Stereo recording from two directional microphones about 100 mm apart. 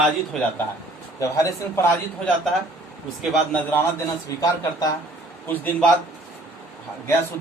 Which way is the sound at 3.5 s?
20° left (ahead or behind).